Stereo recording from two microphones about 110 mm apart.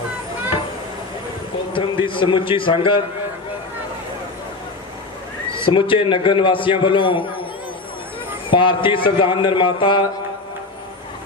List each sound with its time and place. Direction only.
1.7 s a man's voice: 50° left (ahead or behind)
5.6 s a man's voice: 50° left (ahead or behind)
8.4 s a man's voice: 50° left (ahead or behind)